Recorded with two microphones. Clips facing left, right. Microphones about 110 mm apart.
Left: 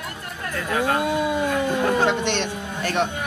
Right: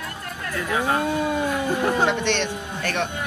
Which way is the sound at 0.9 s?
15° left (ahead or behind).